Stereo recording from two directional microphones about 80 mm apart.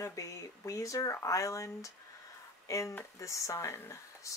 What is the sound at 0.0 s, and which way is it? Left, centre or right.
Speech, left.